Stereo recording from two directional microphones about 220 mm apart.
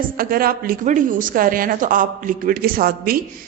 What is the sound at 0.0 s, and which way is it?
A woman's voice, 40° right (ahead or behind).